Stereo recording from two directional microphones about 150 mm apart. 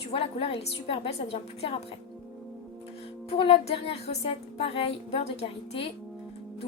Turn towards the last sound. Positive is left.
turn(degrees=40)  # may be behind; listen again after turning